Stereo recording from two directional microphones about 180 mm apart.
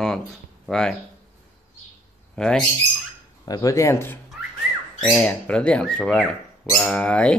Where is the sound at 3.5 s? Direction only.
20° left (ahead or behind).